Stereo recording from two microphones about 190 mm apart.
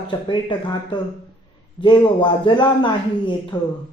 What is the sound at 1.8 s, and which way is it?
Speech, 25° left (ahead or behind).